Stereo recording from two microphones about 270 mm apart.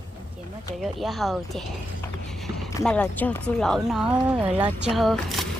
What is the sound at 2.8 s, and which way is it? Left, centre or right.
Speech, centre.